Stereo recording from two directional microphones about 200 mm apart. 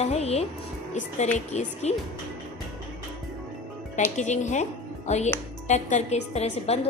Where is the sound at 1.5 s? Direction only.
35° left (ahead or behind).